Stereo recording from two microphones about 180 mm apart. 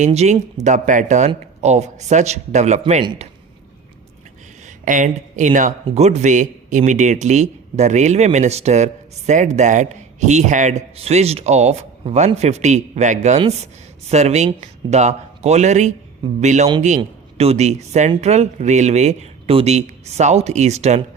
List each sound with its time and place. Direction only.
0.0 s speech: 40° right (ahead or behind)
4.9 s speech: 45° right (ahead or behind)